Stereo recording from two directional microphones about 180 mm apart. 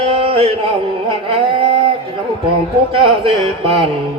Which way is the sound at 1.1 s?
30° right (ahead or behind).